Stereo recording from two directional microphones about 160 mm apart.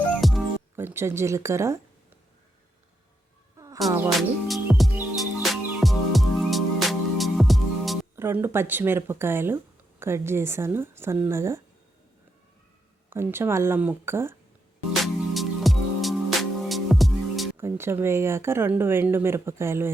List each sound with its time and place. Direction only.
0.2 s music: centre (ahead or behind)
0.8 s speech: 15° right (ahead or behind)
3.8 s speech: 15° right (ahead or behind)
4.2 s music: centre (ahead or behind)
8.1 s speech: 15° right (ahead or behind)
13.1 s speech: 15° right (ahead or behind)
15.0 s music: centre (ahead or behind)
17.6 s speech: 15° right (ahead or behind)